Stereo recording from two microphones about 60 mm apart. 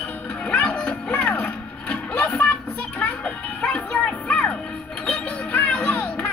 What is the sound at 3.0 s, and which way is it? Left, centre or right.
Music, left.